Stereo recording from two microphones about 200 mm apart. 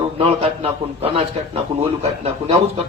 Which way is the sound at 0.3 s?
30° right (ahead or behind).